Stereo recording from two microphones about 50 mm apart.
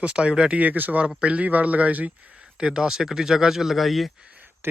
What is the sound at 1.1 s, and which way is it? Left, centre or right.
Speech, right.